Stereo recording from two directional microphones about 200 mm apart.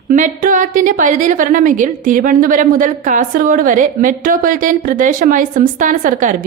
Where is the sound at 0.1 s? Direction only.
40° right (ahead or behind).